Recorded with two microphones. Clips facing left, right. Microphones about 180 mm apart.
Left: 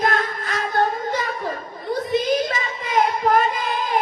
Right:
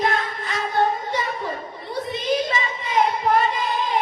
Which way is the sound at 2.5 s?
45° left (ahead or behind).